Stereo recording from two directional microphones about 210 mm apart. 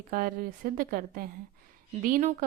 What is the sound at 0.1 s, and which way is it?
A woman's voice, 40° right (ahead or behind).